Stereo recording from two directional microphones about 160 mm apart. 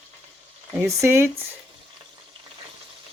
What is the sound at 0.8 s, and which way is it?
Speech, 15° right (ahead or behind).